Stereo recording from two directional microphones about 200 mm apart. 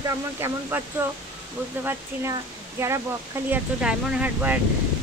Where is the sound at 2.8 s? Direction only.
10° right (ahead or behind).